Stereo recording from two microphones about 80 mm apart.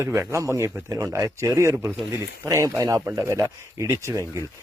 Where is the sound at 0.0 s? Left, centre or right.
Right.